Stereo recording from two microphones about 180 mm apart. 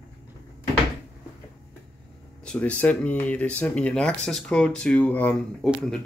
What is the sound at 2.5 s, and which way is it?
Speech, 5° left (ahead or behind).